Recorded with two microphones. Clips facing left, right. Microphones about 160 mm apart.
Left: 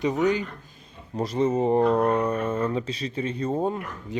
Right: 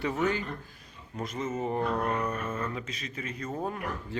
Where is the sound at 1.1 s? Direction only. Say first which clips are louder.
Left 10 dB; 35° left (ahead or behind).